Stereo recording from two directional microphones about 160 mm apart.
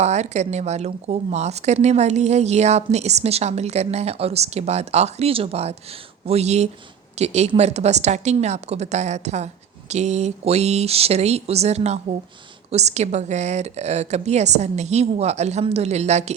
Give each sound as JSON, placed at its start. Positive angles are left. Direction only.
{"t": 0.0, "sound": "a woman's voice", "side_deg": -45}